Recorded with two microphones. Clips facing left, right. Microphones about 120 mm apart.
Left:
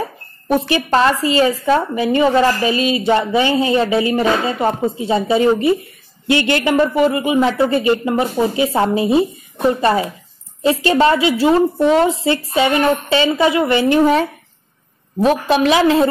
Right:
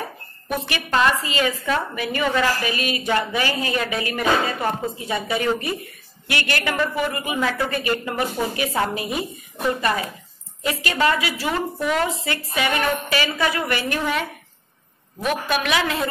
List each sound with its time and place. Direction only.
0.0 s speech: 30° left (ahead or behind)
15.2 s speech: 30° left (ahead or behind)